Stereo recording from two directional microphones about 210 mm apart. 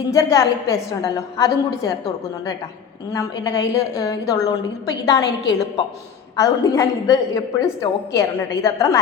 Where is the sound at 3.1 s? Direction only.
20° left (ahead or behind).